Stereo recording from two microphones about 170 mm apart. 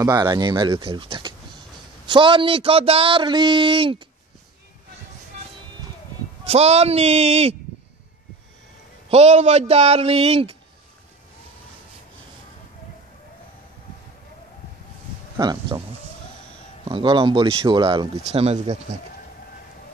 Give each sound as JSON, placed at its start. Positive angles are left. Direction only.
{"t": 0.0, "sound": "speech", "side_deg": -25}
{"t": 6.4, "sound": "a man's voice", "side_deg": -40}
{"t": 9.1, "sound": "a man's voice", "side_deg": -40}
{"t": 15.3, "sound": "speech", "side_deg": -25}
{"t": 16.8, "sound": "a man's voice", "side_deg": -30}